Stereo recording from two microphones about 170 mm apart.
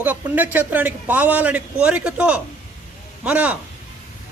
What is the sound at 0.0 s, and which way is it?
A man's voice, 10° right (ahead or behind).